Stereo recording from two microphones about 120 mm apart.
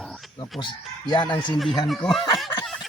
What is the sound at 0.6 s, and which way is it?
Speech, 40° left (ahead or behind).